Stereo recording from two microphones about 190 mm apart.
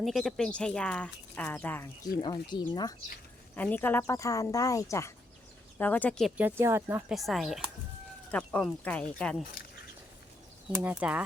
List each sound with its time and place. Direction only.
0.0 s speech: centre (ahead or behind)
2.2 s speech: 25° left (ahead or behind)
3.5 s speech: 10° left (ahead or behind); by 7.0 s 15° right (ahead or behind)
7.1 s speech: centre (ahead or behind)
10.8 s speech: 10° right (ahead or behind)